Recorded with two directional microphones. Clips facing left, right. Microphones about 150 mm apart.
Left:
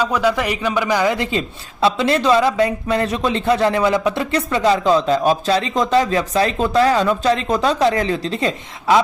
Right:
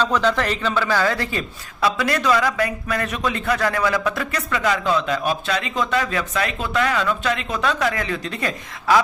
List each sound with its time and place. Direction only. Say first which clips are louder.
0.0 s a man's voice: left 2 dB; 10° left (ahead or behind); by 9.0 s 25° left (ahead or behind)